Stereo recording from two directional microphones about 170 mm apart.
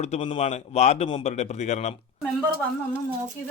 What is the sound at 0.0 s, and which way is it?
A man's voice, 40° left (ahead or behind).